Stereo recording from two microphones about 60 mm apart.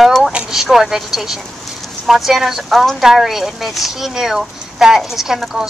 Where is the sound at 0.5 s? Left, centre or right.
Centre.